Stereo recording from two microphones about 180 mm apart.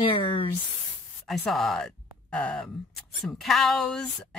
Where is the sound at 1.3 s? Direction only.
Centre (ahead or behind).